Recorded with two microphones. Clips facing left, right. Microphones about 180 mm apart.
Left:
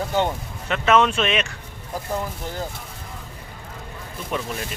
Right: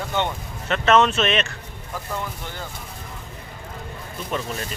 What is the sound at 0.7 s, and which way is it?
Speech, 10° left (ahead or behind).